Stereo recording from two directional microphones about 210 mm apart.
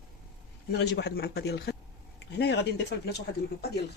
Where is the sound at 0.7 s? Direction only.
55° left (ahead or behind).